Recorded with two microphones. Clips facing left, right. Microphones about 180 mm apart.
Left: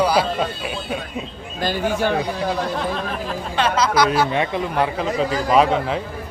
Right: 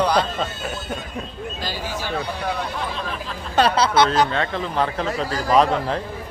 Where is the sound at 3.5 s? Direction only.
35° right (ahead or behind).